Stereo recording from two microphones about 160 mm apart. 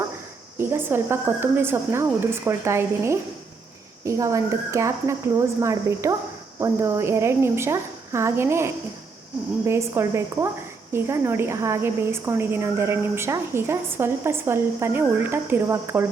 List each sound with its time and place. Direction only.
0.6 s a woman's voice: 15° right (ahead or behind)